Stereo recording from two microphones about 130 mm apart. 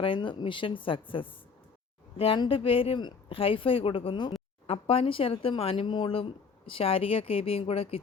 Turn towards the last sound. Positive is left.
turn(degrees=50)  # may be behind; listen again after turning